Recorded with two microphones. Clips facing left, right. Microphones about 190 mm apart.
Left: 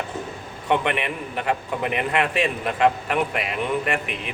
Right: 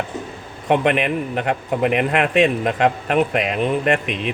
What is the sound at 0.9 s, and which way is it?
Speech, 90° right.